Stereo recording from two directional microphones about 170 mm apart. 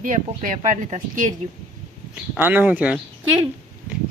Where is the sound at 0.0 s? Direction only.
50° right (ahead or behind).